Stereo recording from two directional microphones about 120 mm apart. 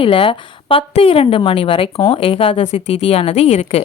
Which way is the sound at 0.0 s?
45° left (ahead or behind).